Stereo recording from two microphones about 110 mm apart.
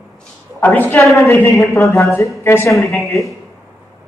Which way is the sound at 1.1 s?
25° left (ahead or behind).